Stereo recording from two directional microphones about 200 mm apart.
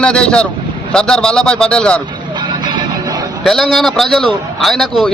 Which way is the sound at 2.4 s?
20° right (ahead or behind).